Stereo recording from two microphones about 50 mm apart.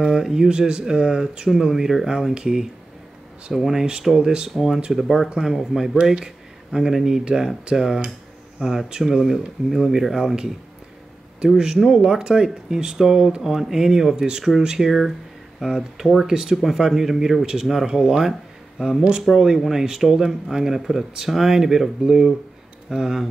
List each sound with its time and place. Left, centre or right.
0.0 s speech: centre
4.9 s speech: centre
11.4 s speech: centre